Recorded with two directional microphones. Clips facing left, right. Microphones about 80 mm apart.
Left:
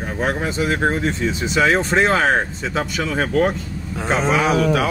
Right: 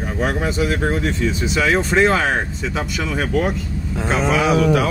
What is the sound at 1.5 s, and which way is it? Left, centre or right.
Speech, left.